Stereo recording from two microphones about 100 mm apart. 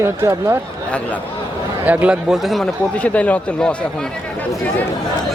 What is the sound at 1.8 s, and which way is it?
Speech, 15° right (ahead or behind).